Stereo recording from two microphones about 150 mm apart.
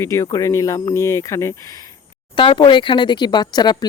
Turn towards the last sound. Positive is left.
turn(degrees=30)  # may be behind; listen again after turning